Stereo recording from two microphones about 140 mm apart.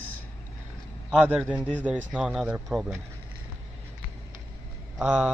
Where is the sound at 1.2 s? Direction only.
10° right (ahead or behind).